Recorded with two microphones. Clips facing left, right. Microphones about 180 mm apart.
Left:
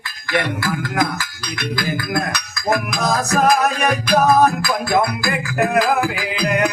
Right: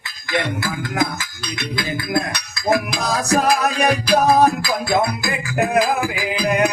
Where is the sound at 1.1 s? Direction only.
25° right (ahead or behind).